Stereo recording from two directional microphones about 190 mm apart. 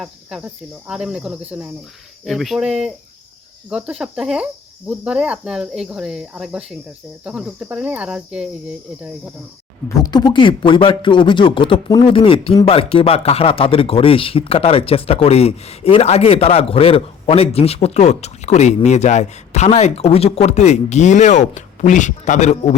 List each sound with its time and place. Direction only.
0.0 s speech: 5° right (ahead or behind)
10.0 s speech: 20° left (ahead or behind); by 22.5 s 40° left (ahead or behind)